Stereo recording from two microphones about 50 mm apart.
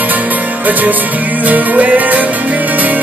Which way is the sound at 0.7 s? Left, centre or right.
Right.